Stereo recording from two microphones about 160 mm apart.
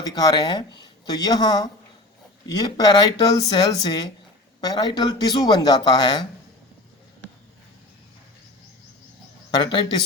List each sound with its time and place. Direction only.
0.1 s speech: 25° left (ahead or behind)
9.5 s speech: 30° left (ahead or behind)